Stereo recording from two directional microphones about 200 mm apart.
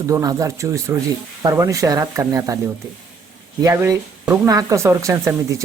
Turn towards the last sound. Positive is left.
turn(degrees=-15)  # may be behind; listen again after turning